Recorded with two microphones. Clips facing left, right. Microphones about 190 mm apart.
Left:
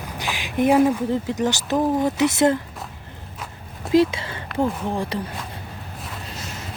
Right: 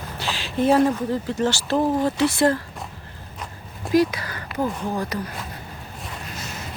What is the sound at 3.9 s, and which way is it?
Speech, 25° left (ahead or behind).